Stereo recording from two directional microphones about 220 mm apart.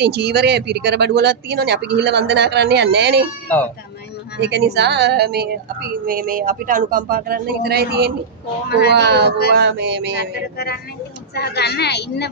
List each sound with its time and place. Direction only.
0.0 s speech: 50° right (ahead or behind)
3.4 s speech: 10° left (ahead or behind)
4.4 s speech: 50° right (ahead or behind)
8.6 s a woman's voice: 45° left (ahead or behind)
8.9 s speech: 50° right (ahead or behind)
11.3 s a woman's voice: 45° left (ahead or behind)